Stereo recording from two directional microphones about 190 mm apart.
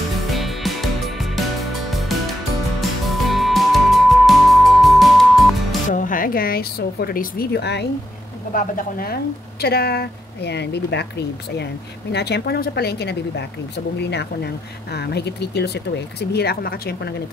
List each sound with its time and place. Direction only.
0.3 s music: centre (ahead or behind)
5.9 s a sound: 45° left (ahead or behind); by 7.8 s 60° left (ahead or behind)
8.5 s a woman's voice: 45° left (ahead or behind)